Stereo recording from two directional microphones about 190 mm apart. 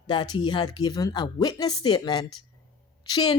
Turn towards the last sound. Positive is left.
turn(degrees=20)  # may be behind; listen again after turning